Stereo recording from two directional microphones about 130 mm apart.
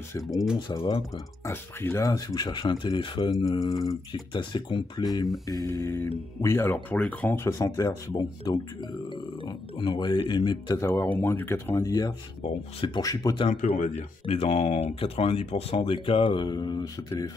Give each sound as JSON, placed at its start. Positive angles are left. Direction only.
{"t": 0.2, "sound": "speech", "side_deg": 0}
{"t": 0.6, "sound": "speech", "side_deg": 35}
{"t": 1.5, "sound": "speech", "side_deg": 20}
{"t": 10.8, "sound": "speech", "side_deg": 20}
{"t": 13.5, "sound": "speech", "side_deg": 65}